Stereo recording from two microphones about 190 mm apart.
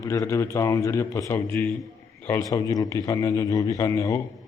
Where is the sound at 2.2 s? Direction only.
10° left (ahead or behind).